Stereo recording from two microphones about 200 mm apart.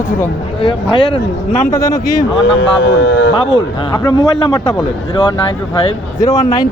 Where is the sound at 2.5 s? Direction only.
65° left (ahead or behind).